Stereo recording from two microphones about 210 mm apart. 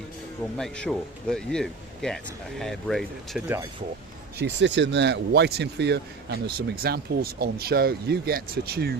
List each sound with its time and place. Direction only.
0.5 s speech: 5° left (ahead or behind)
4.4 s speech: 55° right (ahead or behind)